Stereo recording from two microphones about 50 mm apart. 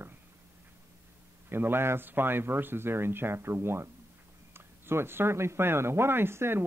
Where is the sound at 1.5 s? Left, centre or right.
Right.